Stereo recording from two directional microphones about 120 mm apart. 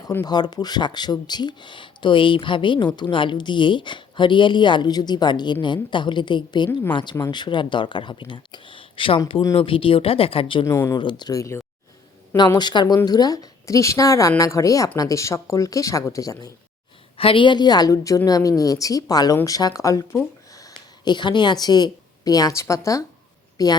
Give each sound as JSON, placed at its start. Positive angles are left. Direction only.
{"t": 0.3, "sound": "speech", "side_deg": 35}
{"t": 10.7, "sound": "a woman's voice", "side_deg": 20}
{"t": 10.9, "sound": "speech", "side_deg": 40}
{"t": 12.4, "sound": "a woman's voice", "side_deg": 35}
{"t": 17.2, "sound": "a woman's voice", "side_deg": 50}